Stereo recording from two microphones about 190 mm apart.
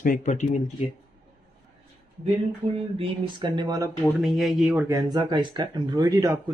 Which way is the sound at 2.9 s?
25° right (ahead or behind).